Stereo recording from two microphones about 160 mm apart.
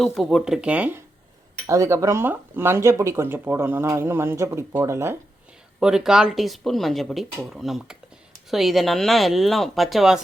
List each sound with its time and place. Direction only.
0.0 s speech: centre (ahead or behind); by 5.1 s 15° right (ahead or behind)
5.8 s speech: 5° right (ahead or behind)